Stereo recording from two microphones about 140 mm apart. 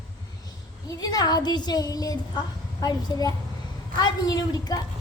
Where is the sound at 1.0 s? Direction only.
30° left (ahead or behind).